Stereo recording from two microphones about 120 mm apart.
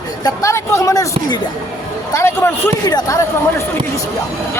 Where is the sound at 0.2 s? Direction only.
25° left (ahead or behind).